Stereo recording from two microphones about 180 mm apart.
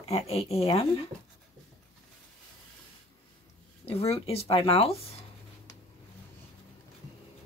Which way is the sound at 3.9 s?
35° left (ahead or behind).